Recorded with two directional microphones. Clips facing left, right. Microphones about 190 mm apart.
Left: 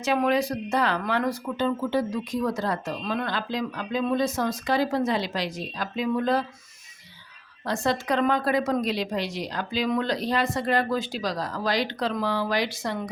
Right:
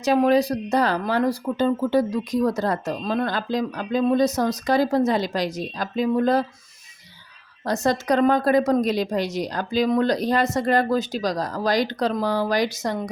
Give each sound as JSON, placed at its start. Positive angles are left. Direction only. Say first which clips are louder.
{"t": 0.0, "sound": "speech", "louder": "right 5 dB", "side_deg": -35}
{"t": 7.7, "sound": "a woman's voice", "louder": "right 4 dB", "side_deg": -40}